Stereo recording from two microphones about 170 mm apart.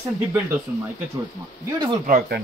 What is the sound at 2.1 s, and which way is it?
Speech, 55° right (ahead or behind).